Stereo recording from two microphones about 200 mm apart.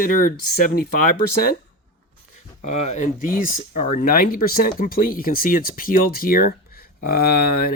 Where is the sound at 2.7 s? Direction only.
35° left (ahead or behind).